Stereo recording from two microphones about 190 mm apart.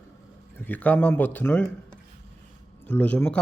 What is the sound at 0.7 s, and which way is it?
Speech, 10° left (ahead or behind).